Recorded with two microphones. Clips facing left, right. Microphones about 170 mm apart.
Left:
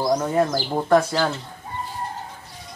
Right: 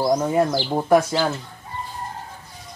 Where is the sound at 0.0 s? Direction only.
5° right (ahead or behind).